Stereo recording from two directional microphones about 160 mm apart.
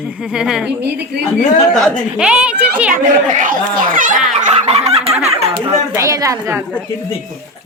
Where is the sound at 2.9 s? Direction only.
55° right (ahead or behind).